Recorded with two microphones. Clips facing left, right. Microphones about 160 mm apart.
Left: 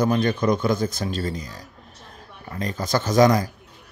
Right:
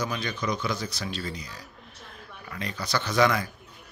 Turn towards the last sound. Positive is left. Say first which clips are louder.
# left 6 dB
turn(degrees=40)  # may be behind; listen again after turning